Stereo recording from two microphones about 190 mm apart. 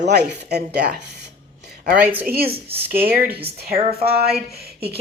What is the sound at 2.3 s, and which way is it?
Speech, 55° right (ahead or behind).